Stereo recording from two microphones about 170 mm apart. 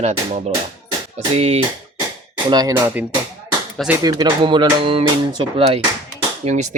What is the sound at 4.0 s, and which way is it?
Speech, 25° right (ahead or behind).